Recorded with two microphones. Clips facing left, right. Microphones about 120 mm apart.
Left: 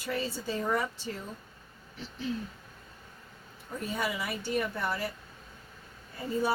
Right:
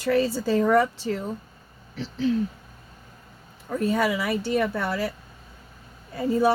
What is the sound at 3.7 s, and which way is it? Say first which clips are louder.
Speech: right 10 dB; 90° right.